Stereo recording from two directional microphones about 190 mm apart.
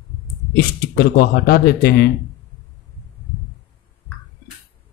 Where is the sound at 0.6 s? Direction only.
55° left (ahead or behind).